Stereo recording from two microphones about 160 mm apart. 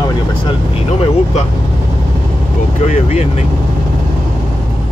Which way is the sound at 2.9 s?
45° left (ahead or behind).